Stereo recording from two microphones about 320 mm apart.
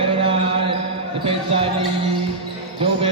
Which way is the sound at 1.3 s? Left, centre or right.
Centre.